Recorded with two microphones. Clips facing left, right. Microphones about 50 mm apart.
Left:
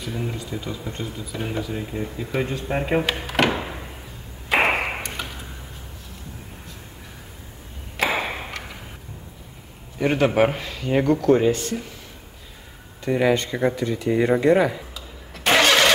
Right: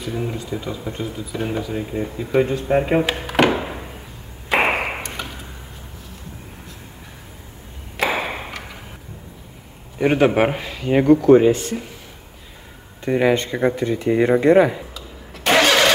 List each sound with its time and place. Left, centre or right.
0.0 s speech: centre
4.5 s ping: centre
8.0 s ping: centre
9.9 s speech: centre
13.0 s speech: right
15.0 s engine starting: centre